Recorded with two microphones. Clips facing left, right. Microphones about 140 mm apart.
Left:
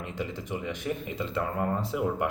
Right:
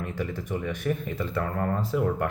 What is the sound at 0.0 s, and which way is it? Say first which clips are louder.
Speech: right 3 dB; 20° left (ahead or behind).